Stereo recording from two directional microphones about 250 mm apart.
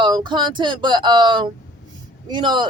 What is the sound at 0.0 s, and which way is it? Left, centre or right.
Speech, centre.